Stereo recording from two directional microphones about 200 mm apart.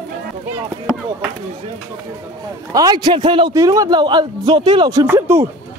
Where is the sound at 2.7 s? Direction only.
20° right (ahead or behind).